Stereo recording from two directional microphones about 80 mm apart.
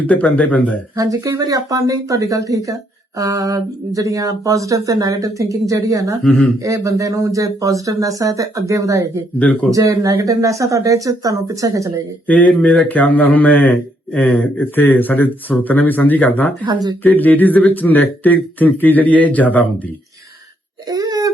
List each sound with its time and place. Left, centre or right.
0.1 s speech: centre
0.9 s speech: right
9.4 s speech: centre
9.6 s speech: right
12.3 s speech: centre
20.9 s whimper: right